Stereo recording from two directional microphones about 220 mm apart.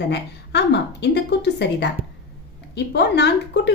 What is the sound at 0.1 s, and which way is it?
A woman's voice, 50° left (ahead or behind).